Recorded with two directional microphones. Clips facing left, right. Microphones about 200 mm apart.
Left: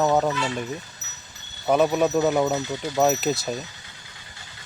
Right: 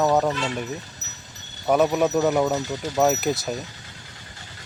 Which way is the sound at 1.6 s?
Centre (ahead or behind).